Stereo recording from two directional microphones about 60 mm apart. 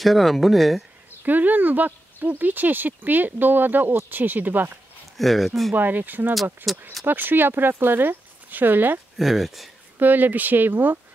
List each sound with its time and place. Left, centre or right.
0.0 s speech: centre
1.2 s speech: right
5.1 s speech: centre
5.8 s speech: right
6.7 s speech: centre
7.1 s speech: right
9.2 s speech: centre
9.9 s speech: right